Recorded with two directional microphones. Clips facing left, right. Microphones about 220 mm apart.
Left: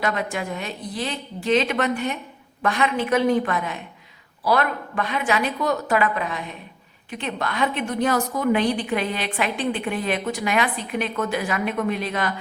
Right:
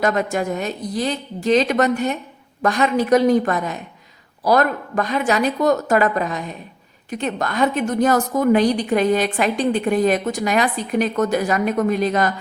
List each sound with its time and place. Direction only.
0.0 s a woman's voice: 45° right (ahead or behind)